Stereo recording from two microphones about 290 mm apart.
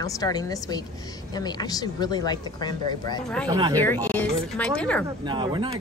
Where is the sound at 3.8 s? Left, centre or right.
Centre.